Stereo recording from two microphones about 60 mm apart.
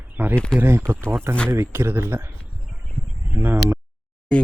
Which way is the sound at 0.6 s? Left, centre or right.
Right.